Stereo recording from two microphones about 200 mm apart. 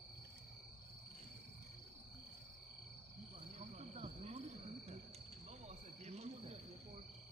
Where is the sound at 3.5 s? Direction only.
35° right (ahead or behind).